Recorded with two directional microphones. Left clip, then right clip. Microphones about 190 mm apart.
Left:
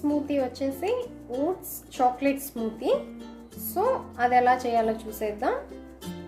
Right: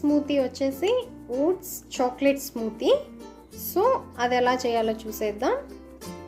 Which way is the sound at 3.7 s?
50° right (ahead or behind).